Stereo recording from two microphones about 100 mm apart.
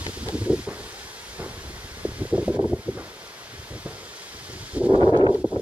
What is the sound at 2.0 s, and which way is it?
Wind, 10° right (ahead or behind).